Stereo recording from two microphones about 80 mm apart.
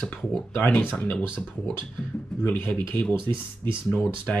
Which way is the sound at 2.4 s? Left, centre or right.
Left.